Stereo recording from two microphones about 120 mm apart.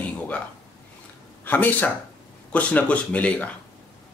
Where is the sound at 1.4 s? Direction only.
15° left (ahead or behind).